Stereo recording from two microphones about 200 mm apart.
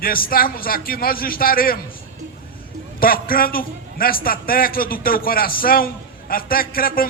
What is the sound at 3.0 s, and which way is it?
A man's voice, 45° left (ahead or behind).